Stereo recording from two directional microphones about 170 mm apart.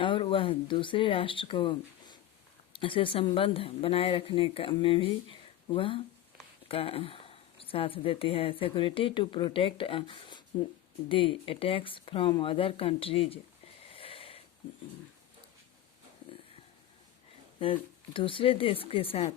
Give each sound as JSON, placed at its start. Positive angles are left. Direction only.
{"t": 0.0, "sound": "speech", "side_deg": 30}
{"t": 13.9, "sound": "a sound", "side_deg": 35}
{"t": 17.6, "sound": "speech", "side_deg": 30}